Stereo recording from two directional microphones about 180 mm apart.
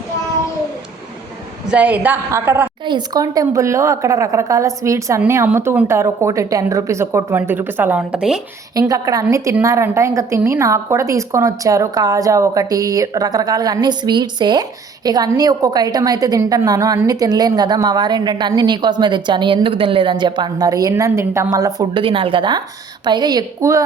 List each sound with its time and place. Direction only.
1.7 s speech: 10° right (ahead or behind)
2.8 s speech: 25° right (ahead or behind); by 8.4 s 5° right (ahead or behind)
8.7 s a woman's voice: 20° right (ahead or behind)